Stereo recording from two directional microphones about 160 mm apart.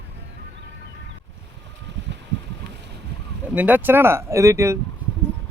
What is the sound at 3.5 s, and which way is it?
Speech, 10° right (ahead or behind).